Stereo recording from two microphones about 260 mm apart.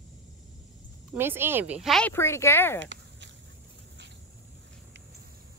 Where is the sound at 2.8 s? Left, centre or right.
Right.